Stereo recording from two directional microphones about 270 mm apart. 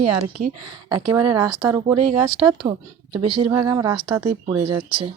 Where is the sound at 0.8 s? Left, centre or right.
Centre.